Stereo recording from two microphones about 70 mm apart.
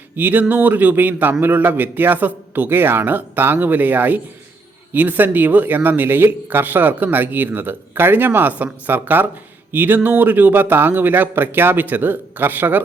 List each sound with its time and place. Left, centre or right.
0.2 s speech: right